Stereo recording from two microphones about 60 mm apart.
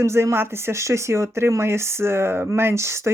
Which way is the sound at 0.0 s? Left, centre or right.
Right.